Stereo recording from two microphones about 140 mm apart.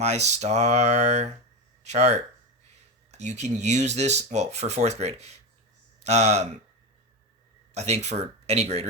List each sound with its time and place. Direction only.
0.0 s speech: 55° right (ahead or behind)
7.7 s speech: 50° right (ahead or behind)